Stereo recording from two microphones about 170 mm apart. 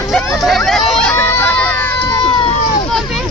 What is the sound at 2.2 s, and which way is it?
Run, 30° left (ahead or behind).